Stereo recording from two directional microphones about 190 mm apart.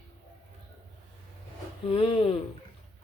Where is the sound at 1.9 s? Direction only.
30° left (ahead or behind).